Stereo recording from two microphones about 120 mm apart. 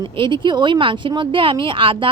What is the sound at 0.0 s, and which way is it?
A woman's voice, 40° right (ahead or behind).